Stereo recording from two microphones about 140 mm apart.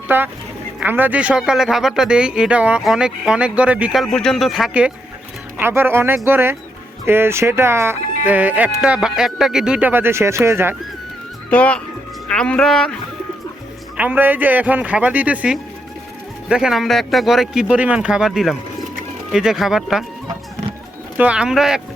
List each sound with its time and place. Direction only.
0.1 s speech: 15° right (ahead or behind)
4.0 s speech: 5° left (ahead or behind)
5.5 s speech: 15° right (ahead or behind)
11.5 s speech: 10° left (ahead or behind)
13.9 s speech: 10° right (ahead or behind)
21.2 s speech: 5° right (ahead or behind)